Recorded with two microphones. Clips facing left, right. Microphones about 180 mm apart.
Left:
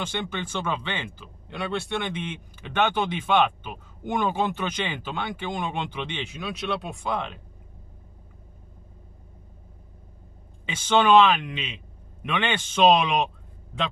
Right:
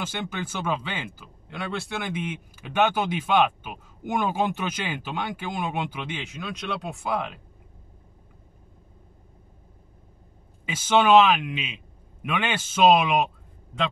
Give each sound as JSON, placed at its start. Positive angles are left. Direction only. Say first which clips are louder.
{"t": 0.0, "sound": "speech", "louder": "left 1 dB", "side_deg": -5}
{"t": 10.6, "sound": "speech", "louder": "right 1 dB", "side_deg": -5}